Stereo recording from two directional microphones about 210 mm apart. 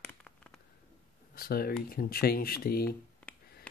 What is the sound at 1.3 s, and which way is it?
Speech, 45° left (ahead or behind).